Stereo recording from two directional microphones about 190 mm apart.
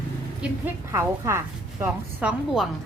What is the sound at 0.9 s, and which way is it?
A woman's voice, 15° right (ahead or behind).